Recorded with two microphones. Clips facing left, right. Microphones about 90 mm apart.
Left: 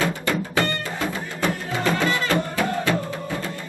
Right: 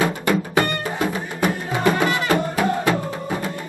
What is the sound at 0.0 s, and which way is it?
Music, 15° right (ahead or behind).